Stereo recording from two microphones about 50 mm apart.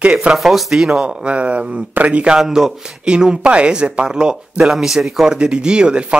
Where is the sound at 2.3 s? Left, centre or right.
Centre.